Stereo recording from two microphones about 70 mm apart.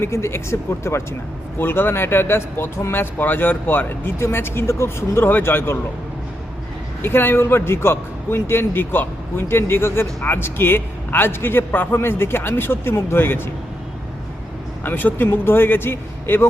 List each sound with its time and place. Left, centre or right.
0.0 s speech: left
7.0 s speech: left
14.8 s speech: left